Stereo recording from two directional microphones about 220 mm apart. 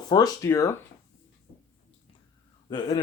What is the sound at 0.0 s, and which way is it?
Speech, 20° left (ahead or behind).